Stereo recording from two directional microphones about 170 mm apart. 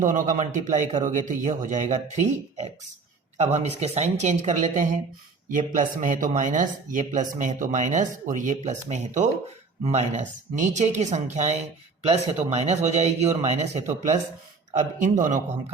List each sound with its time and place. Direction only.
0.0 s a man's voice: 50° right (ahead or behind)